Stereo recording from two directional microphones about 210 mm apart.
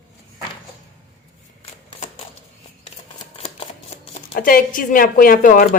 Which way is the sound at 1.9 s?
30° left (ahead or behind).